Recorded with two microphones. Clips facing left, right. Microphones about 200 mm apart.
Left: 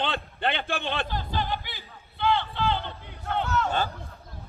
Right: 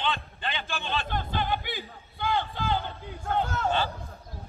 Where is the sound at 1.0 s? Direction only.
50° right (ahead or behind).